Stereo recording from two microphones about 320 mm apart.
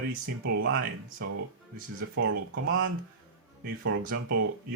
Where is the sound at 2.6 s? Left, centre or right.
Right.